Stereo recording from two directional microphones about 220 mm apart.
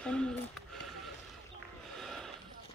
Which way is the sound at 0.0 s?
5° left (ahead or behind).